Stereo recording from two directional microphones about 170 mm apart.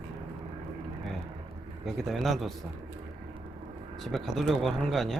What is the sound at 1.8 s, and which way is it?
Speech, centre (ahead or behind).